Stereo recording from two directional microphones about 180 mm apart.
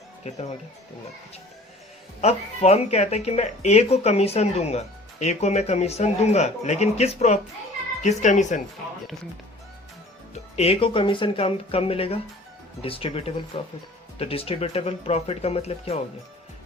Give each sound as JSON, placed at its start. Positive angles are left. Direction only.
{"t": 0.2, "sound": "speech", "side_deg": 35}
{"t": 2.2, "sound": "speech", "side_deg": 35}
{"t": 10.5, "sound": "speech", "side_deg": 35}